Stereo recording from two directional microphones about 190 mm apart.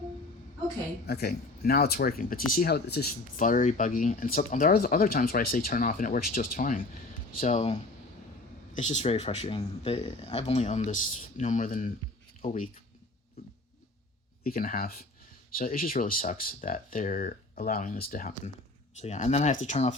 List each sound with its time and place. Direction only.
1.0 s speech: 55° left (ahead or behind)
14.4 s speech: 45° left (ahead or behind)